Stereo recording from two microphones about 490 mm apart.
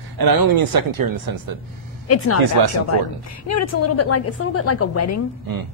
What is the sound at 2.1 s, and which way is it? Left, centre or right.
Speech, left.